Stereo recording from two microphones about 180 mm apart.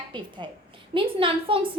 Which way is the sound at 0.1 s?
25° right (ahead or behind).